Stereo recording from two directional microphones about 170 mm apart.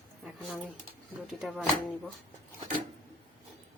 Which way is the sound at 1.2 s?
Centre (ahead or behind).